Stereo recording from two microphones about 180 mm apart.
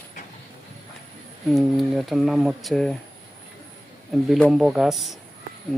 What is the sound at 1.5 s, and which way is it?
Speech, centre (ahead or behind).